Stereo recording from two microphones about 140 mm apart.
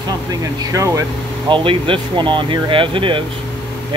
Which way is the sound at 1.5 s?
40° right (ahead or behind).